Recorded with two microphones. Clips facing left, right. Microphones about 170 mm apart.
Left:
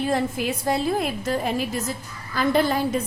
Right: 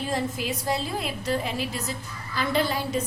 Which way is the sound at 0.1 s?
55° left (ahead or behind).